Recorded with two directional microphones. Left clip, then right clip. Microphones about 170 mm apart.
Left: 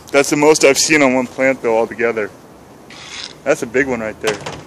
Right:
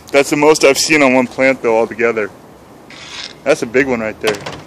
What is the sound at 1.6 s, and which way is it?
Speech, 20° right (ahead or behind).